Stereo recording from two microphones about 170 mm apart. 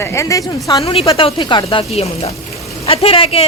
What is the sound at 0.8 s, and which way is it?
Speech, 35° left (ahead or behind).